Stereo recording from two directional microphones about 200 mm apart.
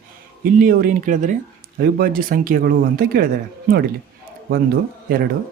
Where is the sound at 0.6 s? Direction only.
45° right (ahead or behind).